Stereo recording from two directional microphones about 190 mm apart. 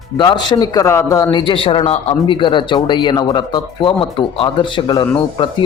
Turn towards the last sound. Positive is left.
turn(degrees=25)  # may be behind; listen again after turning